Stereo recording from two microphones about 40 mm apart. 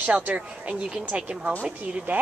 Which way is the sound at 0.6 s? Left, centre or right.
Right.